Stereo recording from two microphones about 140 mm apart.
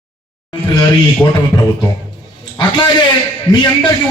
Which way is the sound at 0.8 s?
30° left (ahead or behind).